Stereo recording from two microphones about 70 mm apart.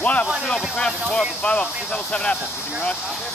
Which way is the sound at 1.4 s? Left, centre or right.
Centre.